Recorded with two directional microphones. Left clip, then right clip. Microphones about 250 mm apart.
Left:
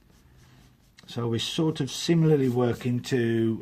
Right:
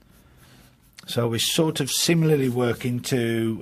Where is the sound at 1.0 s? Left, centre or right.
Right.